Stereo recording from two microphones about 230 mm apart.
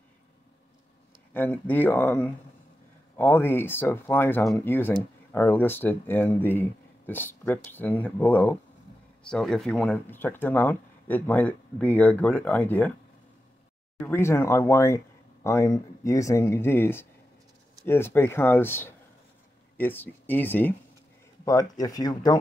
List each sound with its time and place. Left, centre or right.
1.3 s speech: centre
14.0 s speech: centre